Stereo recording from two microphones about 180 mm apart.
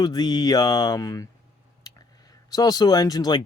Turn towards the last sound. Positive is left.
turn(degrees=20)  # may be behind; listen again after turning